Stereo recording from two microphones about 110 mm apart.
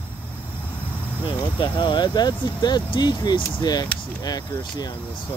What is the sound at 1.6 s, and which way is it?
Speech, 45° left (ahead or behind).